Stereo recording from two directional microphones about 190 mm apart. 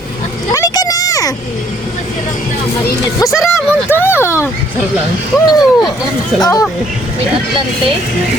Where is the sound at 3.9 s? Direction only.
10° left (ahead or behind).